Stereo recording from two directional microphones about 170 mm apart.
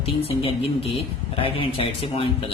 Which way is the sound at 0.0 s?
35° left (ahead or behind).